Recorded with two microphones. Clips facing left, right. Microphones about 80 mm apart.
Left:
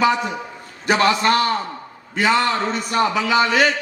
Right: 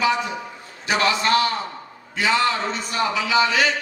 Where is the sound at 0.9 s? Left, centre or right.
Left.